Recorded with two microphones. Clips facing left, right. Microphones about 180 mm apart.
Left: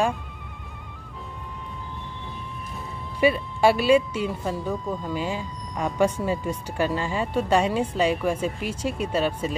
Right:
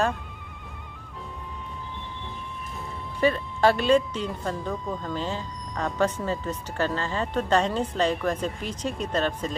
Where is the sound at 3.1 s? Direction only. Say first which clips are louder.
Left 2 dB; 10° left (ahead or behind).